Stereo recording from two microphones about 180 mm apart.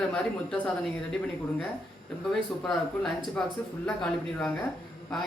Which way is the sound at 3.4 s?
5° left (ahead or behind).